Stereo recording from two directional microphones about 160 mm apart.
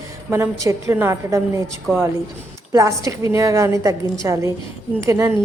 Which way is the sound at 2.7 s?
20° right (ahead or behind).